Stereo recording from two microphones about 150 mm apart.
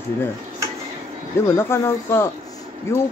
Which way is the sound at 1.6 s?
15° left (ahead or behind).